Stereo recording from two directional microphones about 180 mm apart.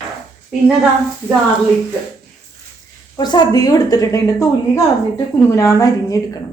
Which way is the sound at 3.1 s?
20° left (ahead or behind).